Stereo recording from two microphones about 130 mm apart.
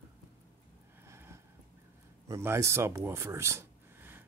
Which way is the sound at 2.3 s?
20° right (ahead or behind).